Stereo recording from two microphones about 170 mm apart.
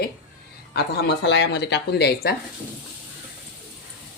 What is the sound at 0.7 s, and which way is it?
Speech, 90° left.